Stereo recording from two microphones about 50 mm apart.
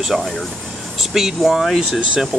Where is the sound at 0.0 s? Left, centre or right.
Centre.